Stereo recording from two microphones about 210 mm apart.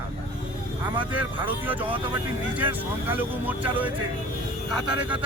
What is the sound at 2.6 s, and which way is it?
Speech, 10° right (ahead or behind).